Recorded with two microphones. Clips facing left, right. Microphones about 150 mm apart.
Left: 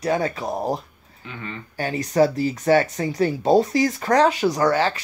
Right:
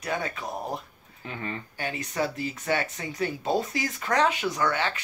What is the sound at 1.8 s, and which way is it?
Speech, 40° left (ahead or behind).